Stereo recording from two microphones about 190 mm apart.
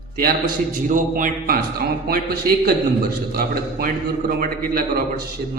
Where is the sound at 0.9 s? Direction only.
45° right (ahead or behind).